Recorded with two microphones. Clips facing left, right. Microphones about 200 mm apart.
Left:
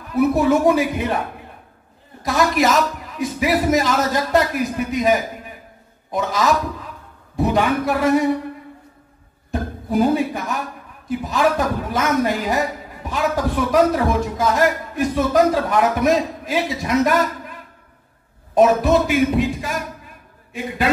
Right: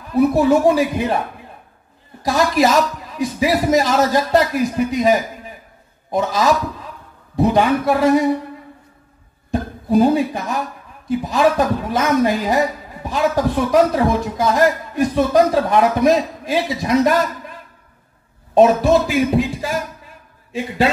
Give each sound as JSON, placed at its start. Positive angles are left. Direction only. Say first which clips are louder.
{"t": 0.1, "sound": "a man's voice", "louder": "right 2 dB", "side_deg": -30}
{"t": 2.2, "sound": "a man's voice", "louder": "right 2 dB", "side_deg": -30}
{"t": 6.1, "sound": "a man's voice", "louder": "right 2 dB", "side_deg": -30}
{"t": 9.5, "sound": "a man's voice", "louder": "right 5 dB", "side_deg": -25}
{"t": 18.5, "sound": "a man's voice", "louder": "right 2 dB", "side_deg": -25}